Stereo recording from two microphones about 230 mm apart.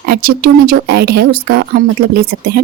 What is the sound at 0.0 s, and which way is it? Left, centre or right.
Speech, right.